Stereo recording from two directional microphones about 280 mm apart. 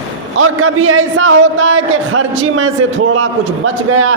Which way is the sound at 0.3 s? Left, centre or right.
Right.